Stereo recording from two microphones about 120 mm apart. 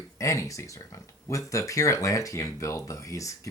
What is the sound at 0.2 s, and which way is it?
Speech, 25° left (ahead or behind).